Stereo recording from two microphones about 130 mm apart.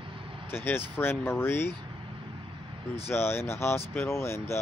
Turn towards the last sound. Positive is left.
turn(degrees=20)  # may be behind; listen again after turning